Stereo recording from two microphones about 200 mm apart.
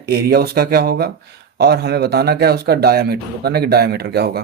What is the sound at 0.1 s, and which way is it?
Speech, 50° right (ahead or behind).